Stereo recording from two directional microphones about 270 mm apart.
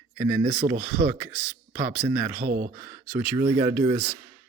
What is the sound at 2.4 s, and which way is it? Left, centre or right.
Speech, right.